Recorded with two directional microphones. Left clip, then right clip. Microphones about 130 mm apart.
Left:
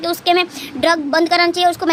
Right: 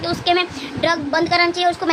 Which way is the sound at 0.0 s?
50° left (ahead or behind).